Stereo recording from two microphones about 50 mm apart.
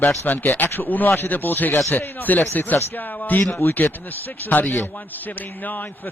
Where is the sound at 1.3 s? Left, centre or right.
Left.